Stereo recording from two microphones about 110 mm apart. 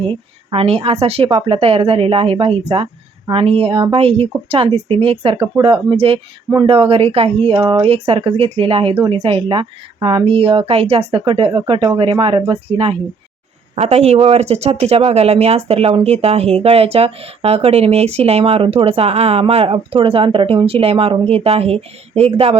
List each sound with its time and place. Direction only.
0.0 s speech: 60° right (ahead or behind)
1.3 s speech: 55° right (ahead or behind)
7.6 s speech: 45° right (ahead or behind)
7.9 s speech: 60° right (ahead or behind)
13.7 s speech: 75° right (ahead or behind)